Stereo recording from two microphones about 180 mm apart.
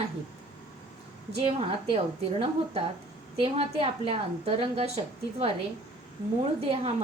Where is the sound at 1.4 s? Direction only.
30° right (ahead or behind).